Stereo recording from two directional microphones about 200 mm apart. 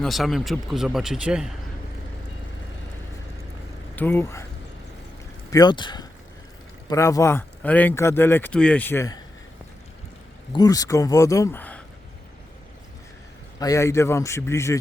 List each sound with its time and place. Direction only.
0.0 s speech: centre (ahead or behind)
3.9 s speech: 10° left (ahead or behind)
5.5 s speech: 20° left (ahead or behind)
10.5 s speech: 20° left (ahead or behind)
13.6 s speech: 15° left (ahead or behind)